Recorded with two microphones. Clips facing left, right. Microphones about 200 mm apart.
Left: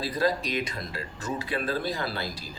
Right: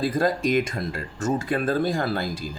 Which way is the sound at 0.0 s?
50° right (ahead or behind).